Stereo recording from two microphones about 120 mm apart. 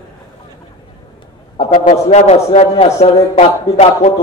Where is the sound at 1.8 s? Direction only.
80° left; by 4.2 s 60° left (ahead or behind).